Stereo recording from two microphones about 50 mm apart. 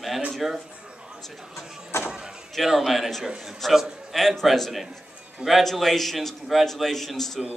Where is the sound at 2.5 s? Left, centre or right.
Centre.